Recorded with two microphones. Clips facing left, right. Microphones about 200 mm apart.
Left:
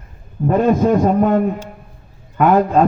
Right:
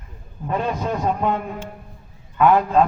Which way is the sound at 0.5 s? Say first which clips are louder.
Left 10 dB; 45° left (ahead or behind).